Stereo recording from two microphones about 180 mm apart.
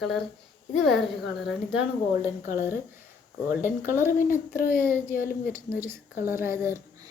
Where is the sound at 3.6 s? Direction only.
15° right (ahead or behind).